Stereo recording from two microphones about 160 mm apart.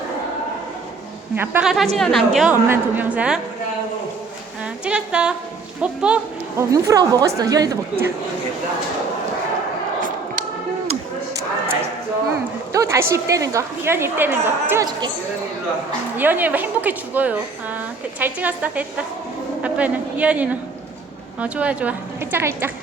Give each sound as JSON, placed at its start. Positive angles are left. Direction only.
{"t": 1.4, "sound": "a woman's voice", "side_deg": -10}
{"t": 2.0, "sound": "a woman's voice", "side_deg": 0}
{"t": 2.5, "sound": "a woman's voice", "side_deg": -10}
{"t": 4.6, "sound": "a woman's voice", "side_deg": -5}
{"t": 6.6, "sound": "speech", "side_deg": -20}
{"t": 12.7, "sound": "a woman's voice", "side_deg": -20}
{"t": 16.1, "sound": "a woman's voice", "side_deg": -10}